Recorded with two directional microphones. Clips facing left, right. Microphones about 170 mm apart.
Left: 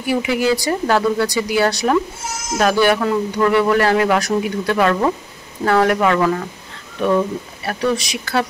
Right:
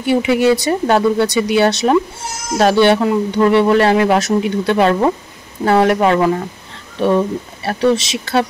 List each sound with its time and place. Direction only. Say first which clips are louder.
0.0 s speech: right 5 dB; 25° right (ahead or behind)